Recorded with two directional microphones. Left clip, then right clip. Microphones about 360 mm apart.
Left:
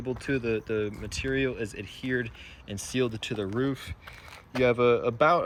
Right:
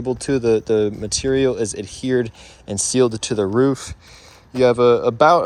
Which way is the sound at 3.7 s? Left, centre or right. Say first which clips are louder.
Right 11 dB; centre.